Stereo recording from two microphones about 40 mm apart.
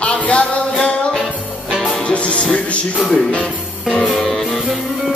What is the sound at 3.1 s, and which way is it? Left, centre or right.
Speech, left.